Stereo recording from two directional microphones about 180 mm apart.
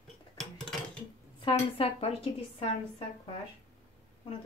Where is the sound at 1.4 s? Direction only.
30° left (ahead or behind).